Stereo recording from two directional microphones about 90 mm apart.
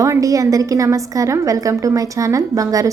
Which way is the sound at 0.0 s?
40° right (ahead or behind).